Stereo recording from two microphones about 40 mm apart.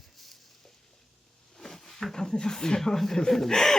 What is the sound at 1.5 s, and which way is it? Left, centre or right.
Speech, centre.